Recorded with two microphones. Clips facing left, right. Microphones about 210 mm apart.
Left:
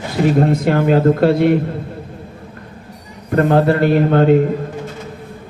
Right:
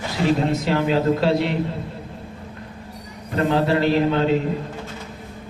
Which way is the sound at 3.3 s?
55° left (ahead or behind).